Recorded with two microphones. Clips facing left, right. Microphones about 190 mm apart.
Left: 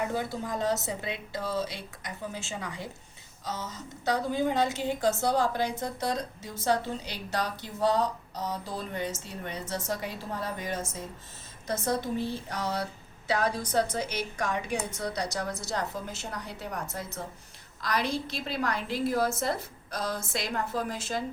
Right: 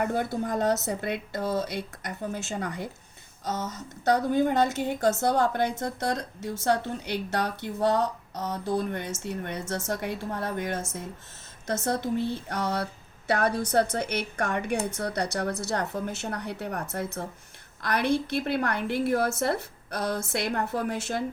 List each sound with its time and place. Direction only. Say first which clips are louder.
0.0 s speech: right 4 dB; 55° right (ahead or behind)
5.8 s a woman's voice: right 2 dB; 70° right (ahead or behind)